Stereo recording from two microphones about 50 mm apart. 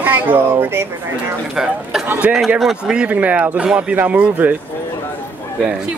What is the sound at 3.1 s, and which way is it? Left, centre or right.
Speech, right.